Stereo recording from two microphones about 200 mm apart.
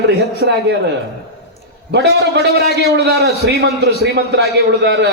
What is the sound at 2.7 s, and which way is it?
A man's voice, 60° right (ahead or behind).